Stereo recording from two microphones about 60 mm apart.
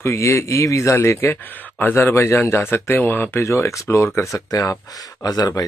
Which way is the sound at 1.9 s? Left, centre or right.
Left.